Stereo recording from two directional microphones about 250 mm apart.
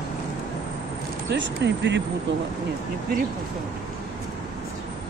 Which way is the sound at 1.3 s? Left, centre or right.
Right.